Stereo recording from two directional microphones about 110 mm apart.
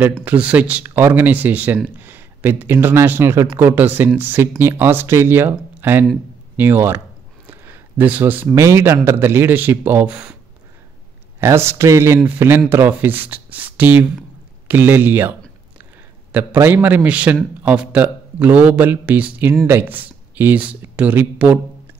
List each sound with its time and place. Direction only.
0.0 s a man's voice: 15° right (ahead or behind)
11.3 s a man's voice: 25° right (ahead or behind)